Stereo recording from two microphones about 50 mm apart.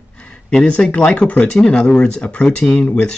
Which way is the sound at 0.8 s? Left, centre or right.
Left.